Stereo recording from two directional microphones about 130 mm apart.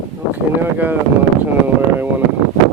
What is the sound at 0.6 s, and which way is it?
Speech, 15° right (ahead or behind).